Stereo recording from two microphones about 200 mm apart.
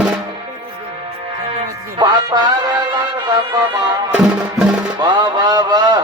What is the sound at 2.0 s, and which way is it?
Music, 20° right (ahead or behind).